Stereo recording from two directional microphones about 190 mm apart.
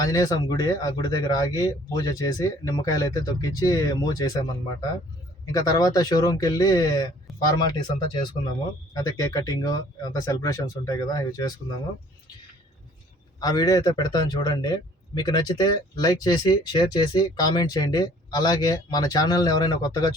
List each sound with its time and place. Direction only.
0.0 s a man's voice: 20° left (ahead or behind)
5.5 s a man's voice: 20° left (ahead or behind)
13.4 s a man's voice: 20° left (ahead or behind)